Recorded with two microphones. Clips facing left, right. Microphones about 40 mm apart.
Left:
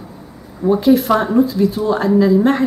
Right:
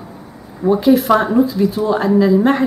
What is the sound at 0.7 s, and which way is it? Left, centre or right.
A woman's voice, centre.